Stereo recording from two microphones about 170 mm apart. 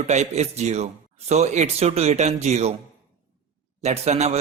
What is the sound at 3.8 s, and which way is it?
Speech, 40° right (ahead or behind).